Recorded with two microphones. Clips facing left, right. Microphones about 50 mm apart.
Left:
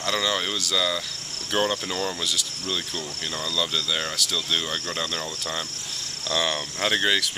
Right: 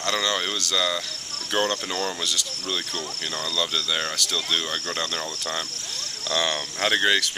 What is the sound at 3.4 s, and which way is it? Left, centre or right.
Speech, centre.